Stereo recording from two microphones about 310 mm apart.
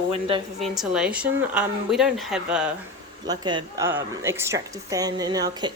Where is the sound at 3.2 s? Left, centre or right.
Centre.